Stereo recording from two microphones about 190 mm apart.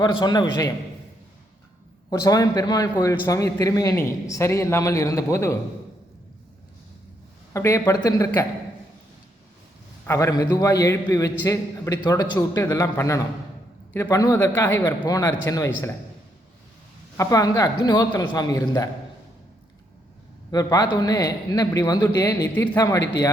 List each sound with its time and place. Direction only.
0.0 s a man's voice: 25° left (ahead or behind)
2.0 s a man's voice: 20° left (ahead or behind)
7.5 s a man's voice: 15° left (ahead or behind)
10.1 s a man's voice: 15° left (ahead or behind)
17.2 s a man's voice: 15° left (ahead or behind)
20.5 s a man's voice: 20° left (ahead or behind)